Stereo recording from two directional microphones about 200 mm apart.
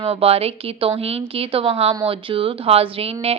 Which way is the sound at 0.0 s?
30° right (ahead or behind).